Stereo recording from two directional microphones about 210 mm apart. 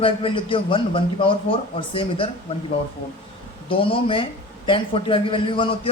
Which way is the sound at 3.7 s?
25° left (ahead or behind).